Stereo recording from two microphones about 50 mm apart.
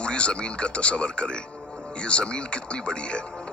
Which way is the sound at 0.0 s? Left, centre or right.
Left.